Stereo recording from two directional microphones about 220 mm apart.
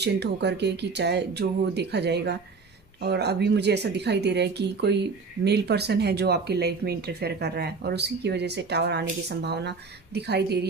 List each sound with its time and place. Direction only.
0.0 s speech: 50° right (ahead or behind)